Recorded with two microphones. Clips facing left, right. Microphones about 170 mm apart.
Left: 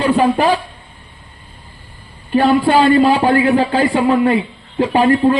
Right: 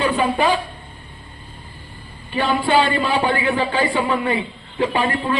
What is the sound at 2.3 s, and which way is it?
A man's voice, 45° left (ahead or behind).